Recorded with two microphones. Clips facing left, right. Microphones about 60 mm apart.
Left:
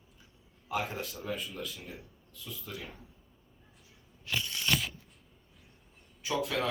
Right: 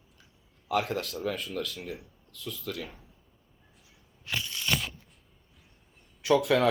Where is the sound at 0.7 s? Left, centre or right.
Right.